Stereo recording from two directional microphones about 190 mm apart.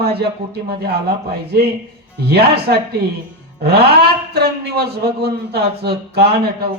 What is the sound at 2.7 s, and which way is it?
A man's voice, 55° right (ahead or behind).